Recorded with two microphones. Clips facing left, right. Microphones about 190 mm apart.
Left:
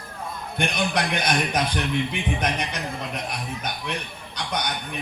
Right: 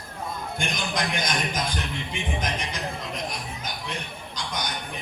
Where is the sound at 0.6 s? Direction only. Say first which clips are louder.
Left 6 dB; 65° left (ahead or behind).